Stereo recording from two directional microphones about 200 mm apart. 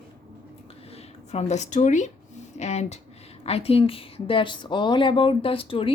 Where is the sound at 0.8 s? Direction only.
30° left (ahead or behind).